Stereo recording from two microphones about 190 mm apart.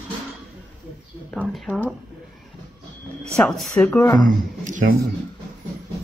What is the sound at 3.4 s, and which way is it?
Speech, centre (ahead or behind).